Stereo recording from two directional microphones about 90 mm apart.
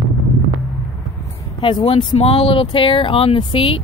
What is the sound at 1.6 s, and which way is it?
A woman's voice, 65° left (ahead or behind).